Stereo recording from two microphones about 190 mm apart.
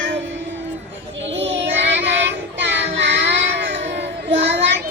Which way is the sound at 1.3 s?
75° right (ahead or behind).